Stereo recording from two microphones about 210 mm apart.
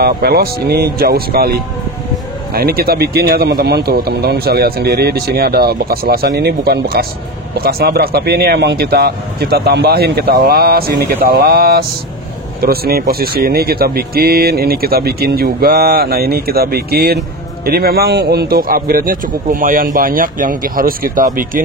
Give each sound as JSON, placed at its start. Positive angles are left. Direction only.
{"t": 0.0, "sound": "speech", "side_deg": -50}